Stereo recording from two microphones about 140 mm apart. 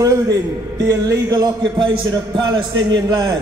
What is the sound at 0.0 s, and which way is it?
A man's voice, 25° right (ahead or behind).